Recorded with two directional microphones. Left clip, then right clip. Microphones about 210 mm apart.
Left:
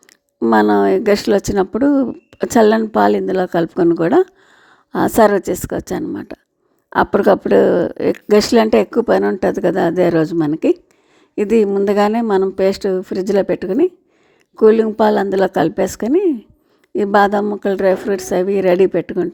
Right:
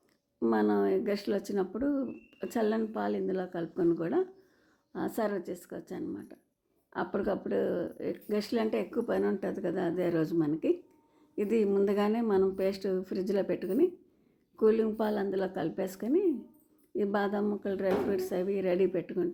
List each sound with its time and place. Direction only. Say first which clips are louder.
0.3 s a woman's voice: left 16 dB; 40° left (ahead or behind)